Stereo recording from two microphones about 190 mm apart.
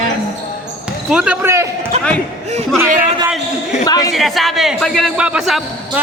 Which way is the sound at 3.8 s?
20° left (ahead or behind).